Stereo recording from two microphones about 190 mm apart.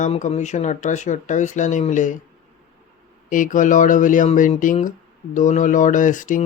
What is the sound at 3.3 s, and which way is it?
Speech, 45° left (ahead or behind).